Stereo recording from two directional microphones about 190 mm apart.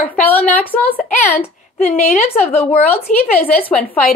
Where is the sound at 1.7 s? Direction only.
40° left (ahead or behind).